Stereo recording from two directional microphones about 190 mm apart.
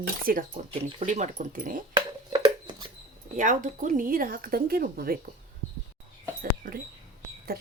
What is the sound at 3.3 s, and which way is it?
Speech, 40° right (ahead or behind).